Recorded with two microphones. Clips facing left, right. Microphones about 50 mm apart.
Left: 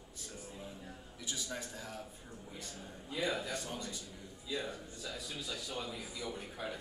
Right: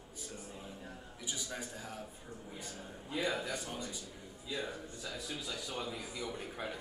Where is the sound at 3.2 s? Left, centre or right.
Centre.